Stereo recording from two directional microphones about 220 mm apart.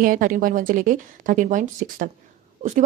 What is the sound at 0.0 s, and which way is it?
Speech, 40° right (ahead or behind).